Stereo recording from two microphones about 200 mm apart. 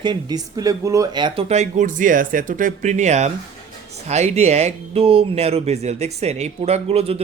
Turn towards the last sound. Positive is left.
turn(degrees=-30)  # may be behind; listen again after turning